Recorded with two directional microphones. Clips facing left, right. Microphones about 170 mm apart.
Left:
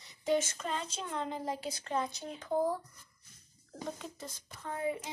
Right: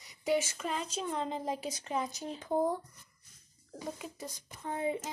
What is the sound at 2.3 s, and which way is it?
Speech, 25° right (ahead or behind).